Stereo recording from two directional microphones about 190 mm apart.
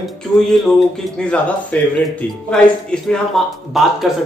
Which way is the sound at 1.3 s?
5° left (ahead or behind).